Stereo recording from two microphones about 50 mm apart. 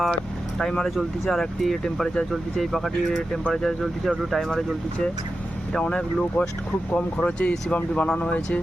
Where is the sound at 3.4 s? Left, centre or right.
Centre.